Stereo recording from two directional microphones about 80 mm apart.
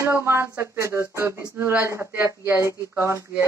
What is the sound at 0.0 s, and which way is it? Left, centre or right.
Speech, right.